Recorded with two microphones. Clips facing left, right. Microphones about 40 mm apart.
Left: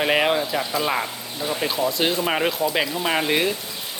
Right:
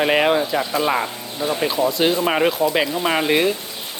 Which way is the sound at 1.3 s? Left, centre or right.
Centre.